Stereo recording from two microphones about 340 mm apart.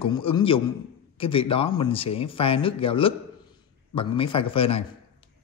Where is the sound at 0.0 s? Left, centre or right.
Centre.